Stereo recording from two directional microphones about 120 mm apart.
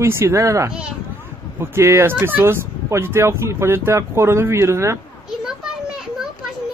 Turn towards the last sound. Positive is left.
turn(degrees=-5)  # may be behind; listen again after turning